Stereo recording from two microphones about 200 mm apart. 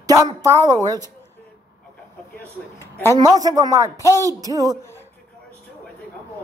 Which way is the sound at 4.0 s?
15° left (ahead or behind).